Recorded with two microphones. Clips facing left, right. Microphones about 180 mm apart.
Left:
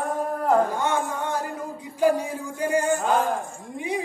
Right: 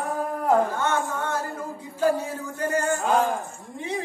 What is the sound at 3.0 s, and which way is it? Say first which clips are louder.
Speech: right 1 dB; centre (ahead or behind).